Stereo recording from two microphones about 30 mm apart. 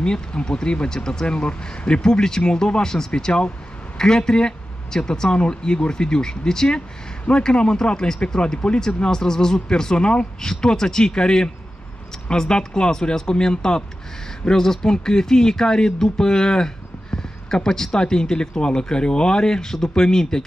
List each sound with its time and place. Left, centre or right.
0.0 s speech: left
1.2 s speech: left
9.1 s speech: left